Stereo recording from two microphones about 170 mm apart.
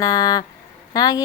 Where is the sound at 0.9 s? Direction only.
25° left (ahead or behind).